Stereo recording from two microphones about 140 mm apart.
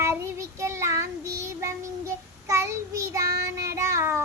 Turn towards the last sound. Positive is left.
turn(degrees=-20)  # may be behind; listen again after turning